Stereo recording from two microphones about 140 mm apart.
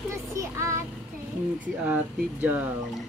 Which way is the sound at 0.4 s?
20° right (ahead or behind).